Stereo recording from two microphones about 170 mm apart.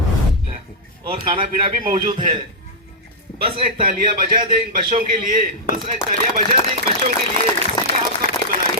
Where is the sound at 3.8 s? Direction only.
55° right (ahead or behind).